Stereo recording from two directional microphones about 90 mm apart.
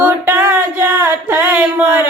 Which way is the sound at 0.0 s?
20° right (ahead or behind).